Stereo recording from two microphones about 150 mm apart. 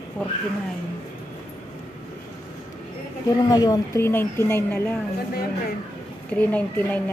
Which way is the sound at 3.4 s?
25° left (ahead or behind).